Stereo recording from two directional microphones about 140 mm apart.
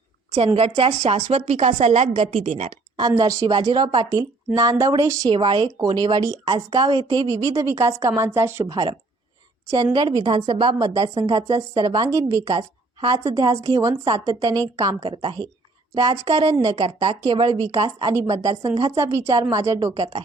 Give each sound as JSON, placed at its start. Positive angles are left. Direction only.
{"t": 0.3, "sound": "a woman's voice", "side_deg": -40}
{"t": 3.2, "sound": "a woman's voice", "side_deg": -20}
{"t": 5.3, "sound": "a woman's voice", "side_deg": -35}
{"t": 8.7, "sound": "a woman's voice", "side_deg": -30}
{"t": 12.5, "sound": "a woman's voice", "side_deg": -35}
{"t": 13.2, "sound": "a woman's voice", "side_deg": -25}
{"t": 15.0, "sound": "a woman's voice", "side_deg": -40}